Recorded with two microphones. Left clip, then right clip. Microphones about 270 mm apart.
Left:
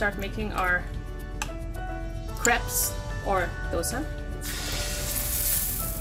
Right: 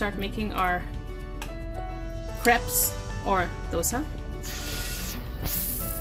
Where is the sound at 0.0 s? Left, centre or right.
Right.